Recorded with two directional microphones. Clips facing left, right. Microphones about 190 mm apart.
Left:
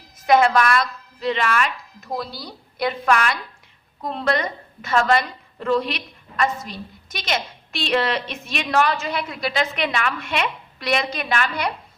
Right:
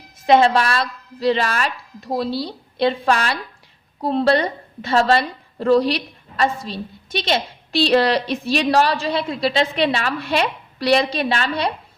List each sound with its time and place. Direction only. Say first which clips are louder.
0.3 s a woman's voice: right 2 dB; 30° right (ahead or behind)